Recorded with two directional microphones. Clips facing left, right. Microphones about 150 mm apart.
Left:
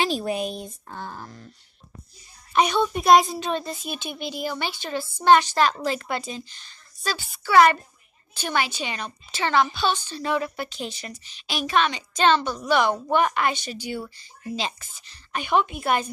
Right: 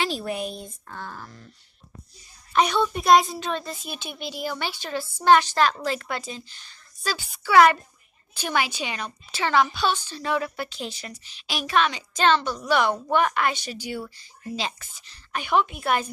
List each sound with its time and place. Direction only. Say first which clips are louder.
0.0 s a woman's voice: left 3 dB; 20° left (ahead or behind)
2.5 s a child's voice: left 1 dB; 5° left (ahead or behind)
3.8 s a woman's voice: left 3 dB; centre (ahead or behind)